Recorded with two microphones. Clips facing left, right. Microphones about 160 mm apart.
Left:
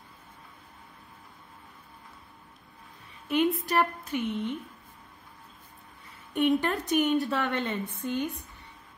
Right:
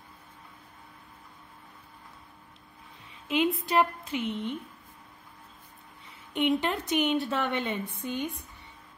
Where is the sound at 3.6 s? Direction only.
15° right (ahead or behind).